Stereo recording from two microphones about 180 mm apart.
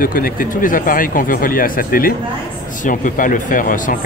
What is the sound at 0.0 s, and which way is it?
Speech, 50° left (ahead or behind).